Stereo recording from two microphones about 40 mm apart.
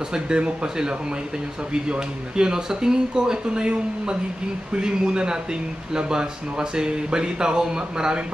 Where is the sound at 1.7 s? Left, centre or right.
Right.